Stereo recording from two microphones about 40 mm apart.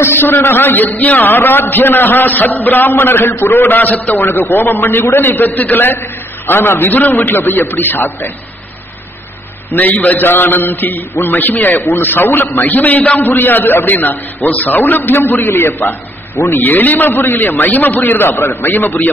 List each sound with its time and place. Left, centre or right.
0.0 s a man's voice: left
4.2 s a man's voice: left
6.9 s a man's voice: left
7.2 s a man's voice: left
9.7 s a man's voice: left
10.2 s a man's voice: left
12.6 s a man's voice: left
16.4 s a man's voice: left
17.6 s a man's voice: left
18.6 s a man's voice: left